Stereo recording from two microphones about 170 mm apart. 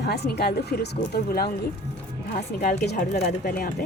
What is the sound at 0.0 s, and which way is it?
Speech, 70° left (ahead or behind).